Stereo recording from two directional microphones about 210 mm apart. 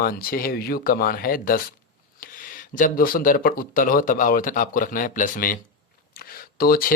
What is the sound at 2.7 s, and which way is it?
Speech, 40° left (ahead or behind).